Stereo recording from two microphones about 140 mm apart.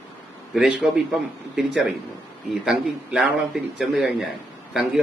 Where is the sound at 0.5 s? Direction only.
5° right (ahead or behind).